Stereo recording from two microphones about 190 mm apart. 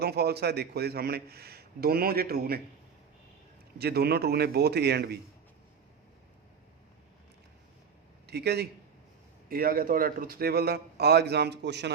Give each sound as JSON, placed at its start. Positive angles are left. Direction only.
{"t": 0.0, "sound": "a man's voice", "side_deg": -55}
{"t": 3.8, "sound": "a man's voice", "side_deg": -55}
{"t": 8.3, "sound": "a man's voice", "side_deg": -60}